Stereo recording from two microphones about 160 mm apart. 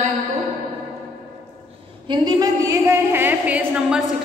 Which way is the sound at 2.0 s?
25° right (ahead or behind).